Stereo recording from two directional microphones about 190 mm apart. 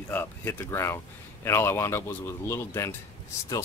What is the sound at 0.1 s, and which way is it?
Speech, 10° left (ahead or behind).